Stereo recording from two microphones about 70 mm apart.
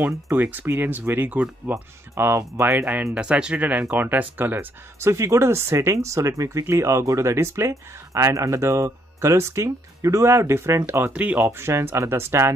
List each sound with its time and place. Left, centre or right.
0.0 s speech: right
2.1 s speech: right
2.8 s speech: centre
5.1 s speech: right
11.1 s speech: right
11.5 s speech: right